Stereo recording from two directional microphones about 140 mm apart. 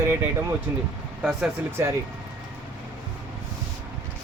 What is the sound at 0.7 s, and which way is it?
Speech, 15° right (ahead or behind).